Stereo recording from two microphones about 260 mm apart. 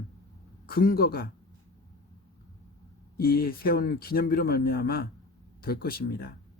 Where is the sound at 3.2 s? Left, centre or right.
Left.